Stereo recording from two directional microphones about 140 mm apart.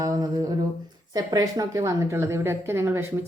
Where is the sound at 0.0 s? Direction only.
25° right (ahead or behind).